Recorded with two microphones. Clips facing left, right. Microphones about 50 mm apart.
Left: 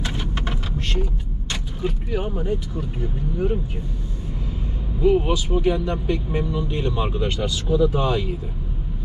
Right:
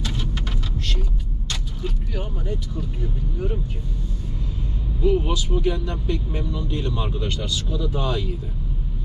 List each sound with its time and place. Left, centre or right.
0.0 s a sound: left
1.5 s speech: left
4.9 s speech: centre